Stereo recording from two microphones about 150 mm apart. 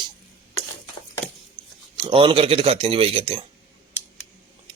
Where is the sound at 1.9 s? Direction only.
35° right (ahead or behind).